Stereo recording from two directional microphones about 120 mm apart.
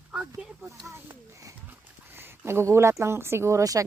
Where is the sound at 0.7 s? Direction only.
25° right (ahead or behind).